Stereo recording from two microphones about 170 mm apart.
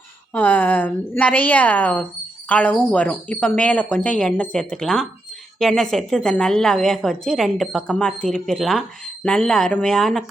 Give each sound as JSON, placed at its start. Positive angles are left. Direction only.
{"t": 0.3, "sound": "a woman's voice", "side_deg": 10}